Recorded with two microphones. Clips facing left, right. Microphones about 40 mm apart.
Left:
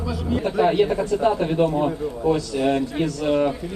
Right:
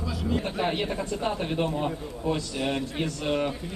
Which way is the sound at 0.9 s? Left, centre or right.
Left.